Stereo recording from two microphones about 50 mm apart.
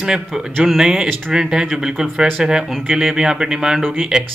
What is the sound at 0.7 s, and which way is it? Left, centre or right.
A man's voice, centre.